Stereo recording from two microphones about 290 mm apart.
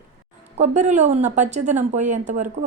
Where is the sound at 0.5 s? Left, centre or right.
Right.